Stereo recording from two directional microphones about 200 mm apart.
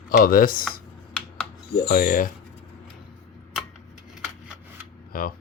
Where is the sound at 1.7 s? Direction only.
45° left (ahead or behind).